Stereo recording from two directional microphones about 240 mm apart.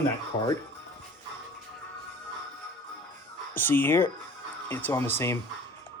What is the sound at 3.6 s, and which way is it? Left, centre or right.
A man's voice, centre.